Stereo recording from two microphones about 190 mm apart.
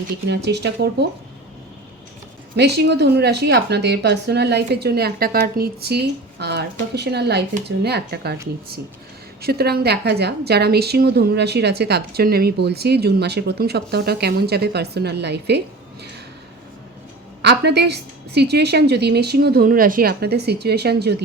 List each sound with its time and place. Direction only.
0.1 s a woman's voice: 60° right (ahead or behind)
2.6 s a woman's voice: 60° right (ahead or behind)
9.4 s a woman's voice: 55° right (ahead or behind)
17.4 s a woman's voice: 60° right (ahead or behind)